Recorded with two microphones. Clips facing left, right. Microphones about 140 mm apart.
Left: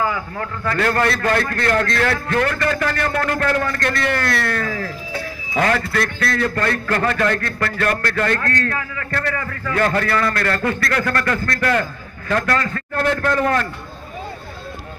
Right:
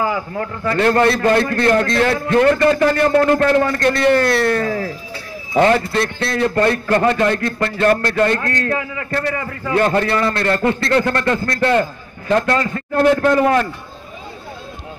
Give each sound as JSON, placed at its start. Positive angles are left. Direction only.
{"t": 0.0, "sound": "a man's voice", "side_deg": -25}